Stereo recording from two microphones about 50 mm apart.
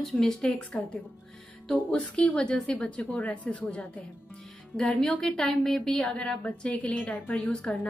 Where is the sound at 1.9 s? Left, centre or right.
Left.